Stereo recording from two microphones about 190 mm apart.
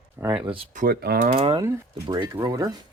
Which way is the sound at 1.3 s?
30° right (ahead or behind).